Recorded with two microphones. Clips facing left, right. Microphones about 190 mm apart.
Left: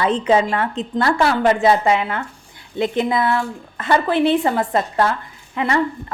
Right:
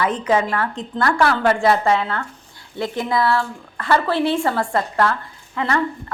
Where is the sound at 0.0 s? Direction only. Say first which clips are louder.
Left 3 dB; 25° left (ahead or behind).